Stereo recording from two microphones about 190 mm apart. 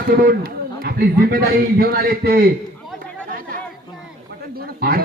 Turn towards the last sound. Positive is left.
turn(degrees=-50)  # may be behind; listen again after turning